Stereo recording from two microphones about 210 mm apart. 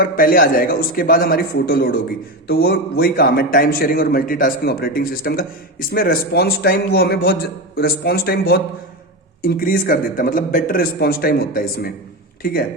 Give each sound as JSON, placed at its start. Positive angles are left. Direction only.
{"t": 0.0, "sound": "a man's voice", "side_deg": 45}